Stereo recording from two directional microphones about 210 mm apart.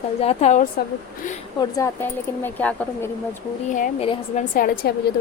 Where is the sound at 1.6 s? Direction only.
15° left (ahead or behind).